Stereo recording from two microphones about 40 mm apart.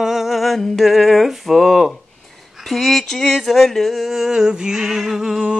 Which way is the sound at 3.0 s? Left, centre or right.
Centre.